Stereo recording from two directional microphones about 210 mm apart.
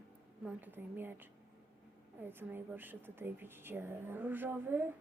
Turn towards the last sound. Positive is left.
turn(degrees=-10)  # may be behind; listen again after turning